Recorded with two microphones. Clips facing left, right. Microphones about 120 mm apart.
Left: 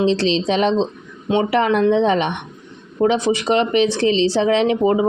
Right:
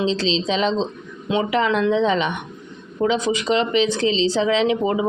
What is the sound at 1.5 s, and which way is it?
Speech, 50° left (ahead or behind).